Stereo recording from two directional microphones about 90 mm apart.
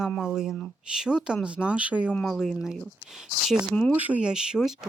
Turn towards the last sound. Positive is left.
turn(degrees=-5)  # may be behind; listen again after turning